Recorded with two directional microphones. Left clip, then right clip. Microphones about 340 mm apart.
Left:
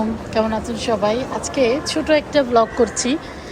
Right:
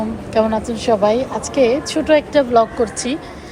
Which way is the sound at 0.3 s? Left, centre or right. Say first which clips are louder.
Right 5 dB; centre.